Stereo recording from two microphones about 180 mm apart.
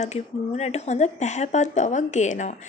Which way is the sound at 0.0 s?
40° left (ahead or behind).